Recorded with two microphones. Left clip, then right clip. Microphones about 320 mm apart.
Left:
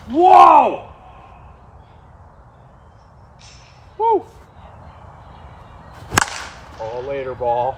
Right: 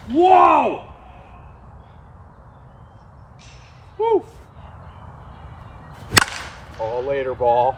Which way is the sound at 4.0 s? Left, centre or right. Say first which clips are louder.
Left 2 dB; centre.